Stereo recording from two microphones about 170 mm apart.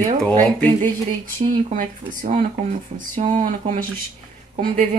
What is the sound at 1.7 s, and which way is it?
Speech, 45° right (ahead or behind).